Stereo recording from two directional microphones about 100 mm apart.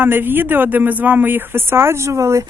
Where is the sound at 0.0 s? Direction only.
20° right (ahead or behind).